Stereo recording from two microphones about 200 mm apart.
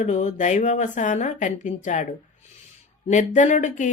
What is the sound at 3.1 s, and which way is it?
Speech, 40° left (ahead or behind).